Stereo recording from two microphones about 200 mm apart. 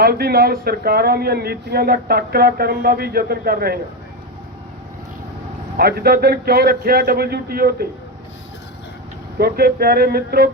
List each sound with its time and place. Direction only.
0.0 s speech: 50° right (ahead or behind)
5.7 s speech: 50° right (ahead or behind)
9.4 s speech: 50° right (ahead or behind)